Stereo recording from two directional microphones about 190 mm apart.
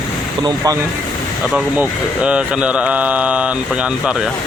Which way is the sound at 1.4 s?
5° right (ahead or behind).